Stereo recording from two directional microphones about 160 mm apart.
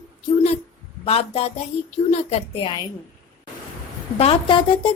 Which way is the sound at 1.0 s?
40° left (ahead or behind).